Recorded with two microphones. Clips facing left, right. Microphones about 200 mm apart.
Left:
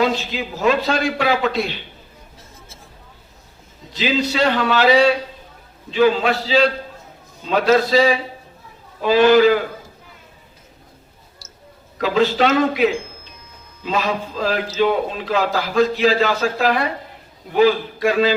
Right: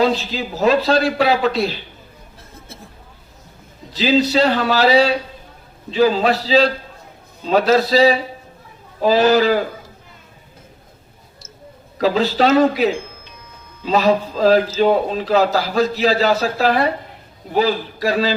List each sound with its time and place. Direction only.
0.0 s a man's voice: 35° right (ahead or behind)
3.9 s a man's voice: 35° right (ahead or behind)
11.9 s a man's voice: 35° right (ahead or behind)